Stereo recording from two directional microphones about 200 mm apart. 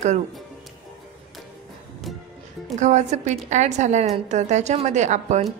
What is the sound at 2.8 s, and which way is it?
A woman's voice, 35° right (ahead or behind).